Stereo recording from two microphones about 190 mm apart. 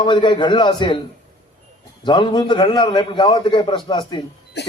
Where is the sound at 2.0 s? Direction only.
25° left (ahead or behind).